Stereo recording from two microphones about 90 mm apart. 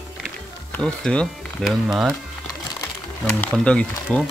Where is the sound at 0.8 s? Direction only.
5° left (ahead or behind).